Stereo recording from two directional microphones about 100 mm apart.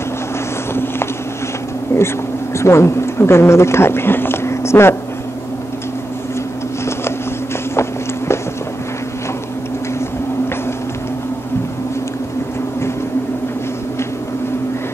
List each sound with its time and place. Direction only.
1.9 s a sound: 25° left (ahead or behind)
2.5 s speech: 25° left (ahead or behind)
7.7 s walk: 25° left (ahead or behind)